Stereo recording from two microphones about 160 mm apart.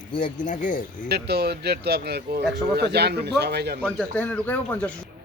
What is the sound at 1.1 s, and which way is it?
Speech, 90° right.